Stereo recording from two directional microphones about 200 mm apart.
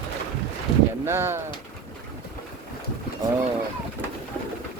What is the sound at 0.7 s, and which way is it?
Speech, 25° left (ahead or behind).